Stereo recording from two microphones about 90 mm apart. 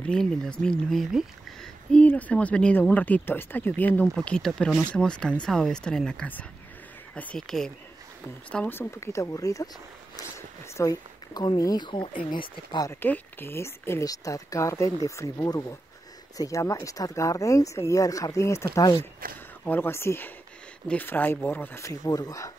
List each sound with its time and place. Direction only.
0.0 s speech: 5° left (ahead or behind)
8.6 s speech: 25° left (ahead or behind)
10.8 s speech: 45° left (ahead or behind)
11.8 s speech: 60° left (ahead or behind)
13.0 s speech: 25° left (ahead or behind)
14.0 s speech: 40° left (ahead or behind)
19.6 s speech: 20° left (ahead or behind)
21.8 s speech: 40° left (ahead or behind)